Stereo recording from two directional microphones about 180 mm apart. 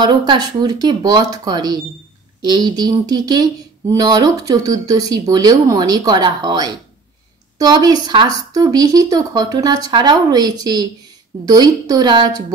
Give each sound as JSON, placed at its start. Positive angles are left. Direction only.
{"t": 0.0, "sound": "speech", "side_deg": -25}